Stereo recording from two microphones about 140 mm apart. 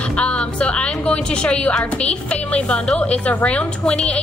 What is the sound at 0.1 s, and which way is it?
A woman's voice, 10° left (ahead or behind).